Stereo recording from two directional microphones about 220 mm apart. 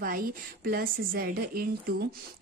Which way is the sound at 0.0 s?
40° right (ahead or behind).